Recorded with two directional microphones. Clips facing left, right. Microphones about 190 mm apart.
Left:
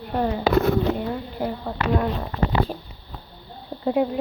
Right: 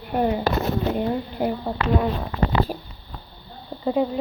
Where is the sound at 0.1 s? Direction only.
15° right (ahead or behind).